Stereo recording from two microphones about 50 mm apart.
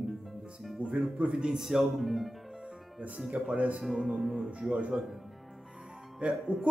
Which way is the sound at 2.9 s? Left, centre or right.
Right.